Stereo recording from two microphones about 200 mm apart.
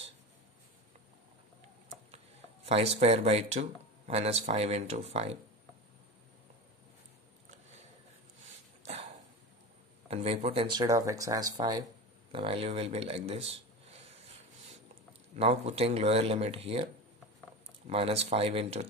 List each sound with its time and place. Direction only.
2.6 s speech: 30° right (ahead or behind)
10.0 s speech: 30° right (ahead or behind)
12.3 s a sound: 25° right (ahead or behind)
15.3 s speech: 30° right (ahead or behind)